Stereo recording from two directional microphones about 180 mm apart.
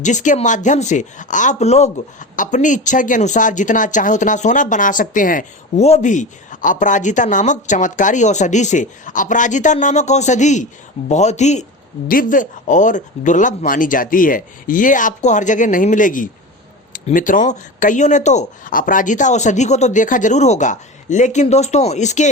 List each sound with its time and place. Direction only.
0.0 s speech: 45° left (ahead or behind)
12.0 s speech: 50° left (ahead or behind)